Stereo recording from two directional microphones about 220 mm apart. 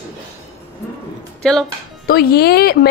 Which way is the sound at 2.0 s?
45° left (ahead or behind).